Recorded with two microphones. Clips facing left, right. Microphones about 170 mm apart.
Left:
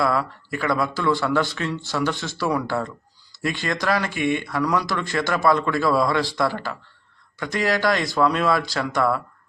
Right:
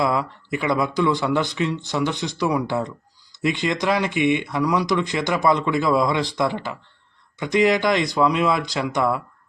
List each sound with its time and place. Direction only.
0.0 s speech: 20° right (ahead or behind)